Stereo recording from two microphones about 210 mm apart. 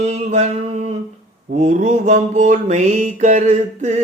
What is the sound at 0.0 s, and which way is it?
Music, 35° right (ahead or behind).